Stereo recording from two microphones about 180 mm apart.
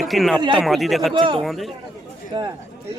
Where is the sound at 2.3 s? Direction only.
25° right (ahead or behind).